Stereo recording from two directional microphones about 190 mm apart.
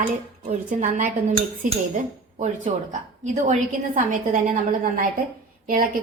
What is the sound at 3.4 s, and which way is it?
A woman's voice, 40° right (ahead or behind).